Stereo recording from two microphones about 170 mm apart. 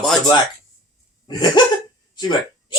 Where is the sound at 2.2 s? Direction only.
25° left (ahead or behind).